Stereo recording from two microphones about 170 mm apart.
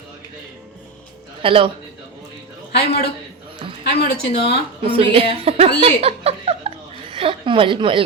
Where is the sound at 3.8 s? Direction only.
75° left (ahead or behind).